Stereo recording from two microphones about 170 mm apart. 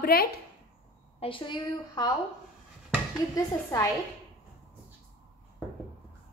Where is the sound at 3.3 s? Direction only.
20° left (ahead or behind).